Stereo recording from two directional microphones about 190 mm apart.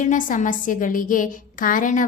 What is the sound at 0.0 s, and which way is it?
A woman's voice, 45° left (ahead or behind).